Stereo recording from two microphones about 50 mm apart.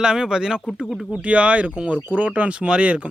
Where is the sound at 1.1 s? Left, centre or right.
Right.